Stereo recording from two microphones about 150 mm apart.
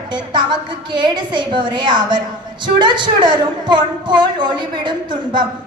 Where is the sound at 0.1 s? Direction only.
30° right (ahead or behind).